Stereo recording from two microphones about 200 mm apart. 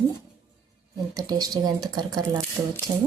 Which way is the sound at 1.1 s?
20° right (ahead or behind).